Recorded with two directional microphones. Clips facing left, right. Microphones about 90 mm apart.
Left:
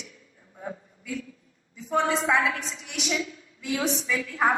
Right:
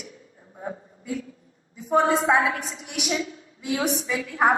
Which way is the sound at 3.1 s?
30° right (ahead or behind).